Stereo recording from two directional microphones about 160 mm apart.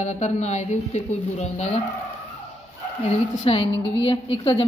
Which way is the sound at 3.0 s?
35° left (ahead or behind).